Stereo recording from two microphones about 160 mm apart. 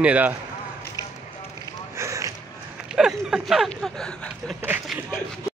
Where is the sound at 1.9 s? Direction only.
20° right (ahead or behind).